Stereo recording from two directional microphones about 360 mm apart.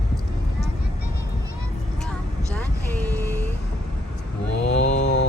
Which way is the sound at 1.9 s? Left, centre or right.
Centre.